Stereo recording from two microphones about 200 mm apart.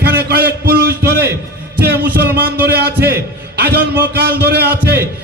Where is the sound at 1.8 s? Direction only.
55° right (ahead or behind).